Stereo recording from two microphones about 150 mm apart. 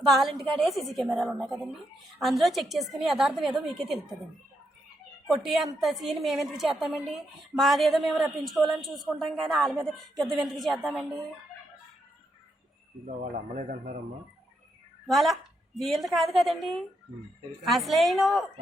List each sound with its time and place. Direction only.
0.3 s a woman's voice: centre (ahead or behind)
5.3 s a woman's voice: centre (ahead or behind)
13.6 s speech: 60° right (ahead or behind)
15.0 s a woman's voice: centre (ahead or behind)